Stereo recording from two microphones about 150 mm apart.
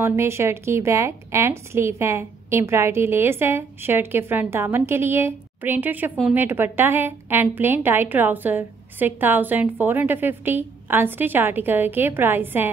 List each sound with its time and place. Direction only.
0.0 s a woman's voice: 15° right (ahead or behind)